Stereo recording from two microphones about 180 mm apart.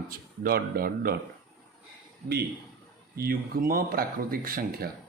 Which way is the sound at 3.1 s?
55° right (ahead or behind).